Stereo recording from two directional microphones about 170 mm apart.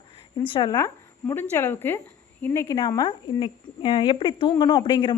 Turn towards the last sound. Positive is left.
turn(degrees=30)  # may be behind; listen again after turning